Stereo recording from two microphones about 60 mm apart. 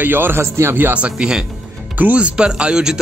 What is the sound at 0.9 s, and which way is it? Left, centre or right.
Speech, centre.